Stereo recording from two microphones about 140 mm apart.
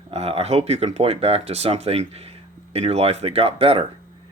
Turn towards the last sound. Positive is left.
turn(degrees=-45)  # may be behind; listen again after turning